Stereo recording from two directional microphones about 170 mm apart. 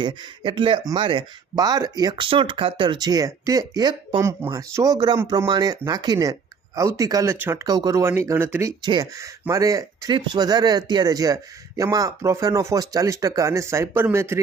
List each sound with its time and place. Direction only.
0.0 s speech: 30° right (ahead or behind)